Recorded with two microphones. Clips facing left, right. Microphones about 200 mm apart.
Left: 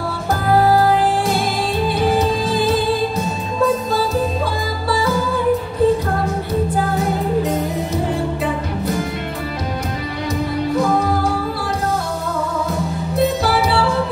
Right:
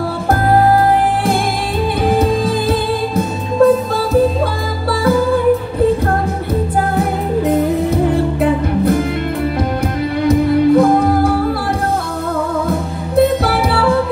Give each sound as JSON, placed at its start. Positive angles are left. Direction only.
{"t": 0.3, "sound": "music", "side_deg": -55}
{"t": 7.0, "sound": "music", "side_deg": -55}
{"t": 10.2, "sound": "music", "side_deg": -55}
{"t": 12.6, "sound": "music", "side_deg": -55}